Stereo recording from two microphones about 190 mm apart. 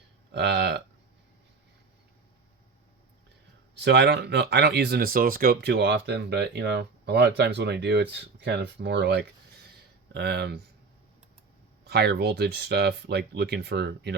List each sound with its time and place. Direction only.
0.3 s a sound: 60° right (ahead or behind)
3.8 s speech: 60° right (ahead or behind)
11.9 s speech: 55° right (ahead or behind)